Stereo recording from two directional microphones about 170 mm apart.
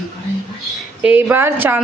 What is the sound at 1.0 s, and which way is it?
Speech, 5° right (ahead or behind).